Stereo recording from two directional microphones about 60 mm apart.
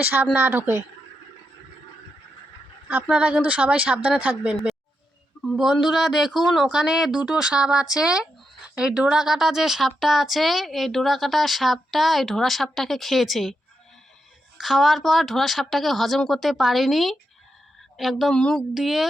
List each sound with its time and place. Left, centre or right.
0.1 s speech: right
2.9 s speech: right
5.5 s speech: centre
14.6 s a woman's voice: centre
18.3 s speech: centre
18.5 s speech: centre